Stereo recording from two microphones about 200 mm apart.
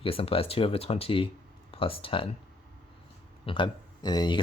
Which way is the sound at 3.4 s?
25° left (ahead or behind).